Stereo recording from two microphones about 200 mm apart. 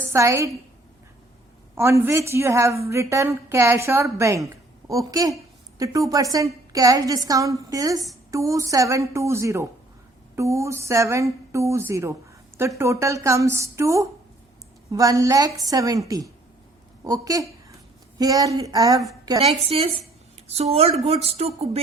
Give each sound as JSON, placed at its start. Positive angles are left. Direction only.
{"t": 0.0, "sound": "a woman's voice", "side_deg": -15}
{"t": 1.7, "sound": "a woman's voice", "side_deg": -15}